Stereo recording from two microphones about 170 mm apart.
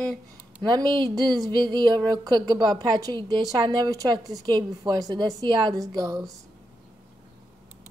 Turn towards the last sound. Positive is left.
turn(degrees=-20)  # may be behind; listen again after turning